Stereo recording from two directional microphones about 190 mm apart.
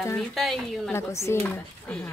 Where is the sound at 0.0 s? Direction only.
10° left (ahead or behind).